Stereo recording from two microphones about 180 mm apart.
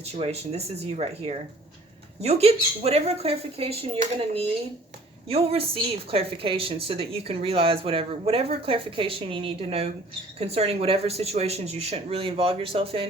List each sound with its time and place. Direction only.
0.1 s a woman's voice: 35° right (ahead or behind)